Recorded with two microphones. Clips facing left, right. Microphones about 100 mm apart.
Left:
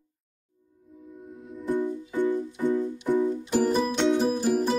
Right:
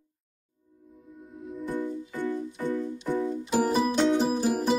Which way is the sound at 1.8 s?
15° left (ahead or behind).